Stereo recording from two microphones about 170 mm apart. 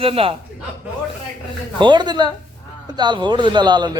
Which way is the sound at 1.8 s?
25° right (ahead or behind).